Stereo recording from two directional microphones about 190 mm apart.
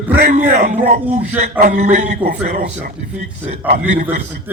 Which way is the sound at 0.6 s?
40° right (ahead or behind).